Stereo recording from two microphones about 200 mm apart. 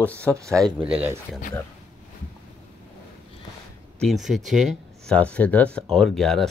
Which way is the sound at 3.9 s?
Centre (ahead or behind).